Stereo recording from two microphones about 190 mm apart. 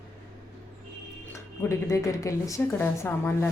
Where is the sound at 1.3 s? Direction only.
15° left (ahead or behind).